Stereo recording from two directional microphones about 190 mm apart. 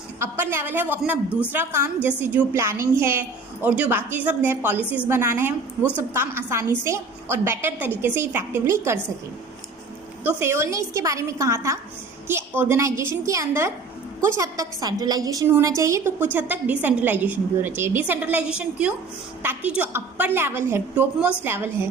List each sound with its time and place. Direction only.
0.2 s a woman's voice: 10° right (ahead or behind)
10.2 s a woman's voice: 15° right (ahead or behind)